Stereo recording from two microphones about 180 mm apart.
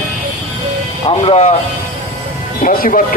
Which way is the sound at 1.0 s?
35° left (ahead or behind).